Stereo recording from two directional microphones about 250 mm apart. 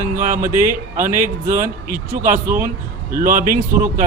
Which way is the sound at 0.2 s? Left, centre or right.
Right.